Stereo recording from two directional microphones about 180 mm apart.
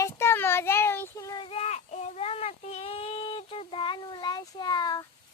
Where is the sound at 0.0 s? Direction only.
15° left (ahead or behind).